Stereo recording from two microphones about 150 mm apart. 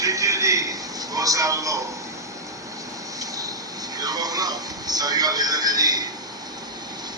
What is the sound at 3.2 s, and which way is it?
Vehicle, 25° right (ahead or behind).